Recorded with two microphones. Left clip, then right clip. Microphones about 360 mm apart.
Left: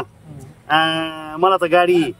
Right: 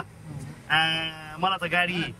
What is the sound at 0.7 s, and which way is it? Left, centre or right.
Speech, centre.